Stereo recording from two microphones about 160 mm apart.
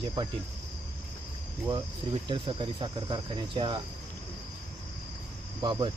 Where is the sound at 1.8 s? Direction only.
30° right (ahead or behind).